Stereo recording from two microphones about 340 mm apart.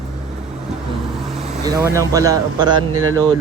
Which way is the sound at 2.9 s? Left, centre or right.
Right.